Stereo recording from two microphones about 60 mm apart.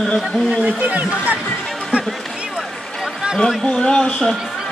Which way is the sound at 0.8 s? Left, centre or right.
Right.